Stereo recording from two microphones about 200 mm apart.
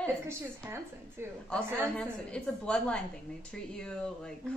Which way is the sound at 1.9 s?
5° left (ahead or behind).